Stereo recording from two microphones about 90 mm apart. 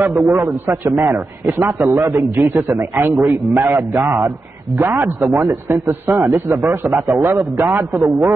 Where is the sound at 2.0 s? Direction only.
40° right (ahead or behind).